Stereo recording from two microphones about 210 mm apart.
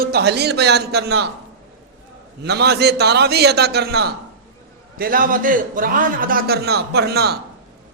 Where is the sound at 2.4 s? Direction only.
50° right (ahead or behind).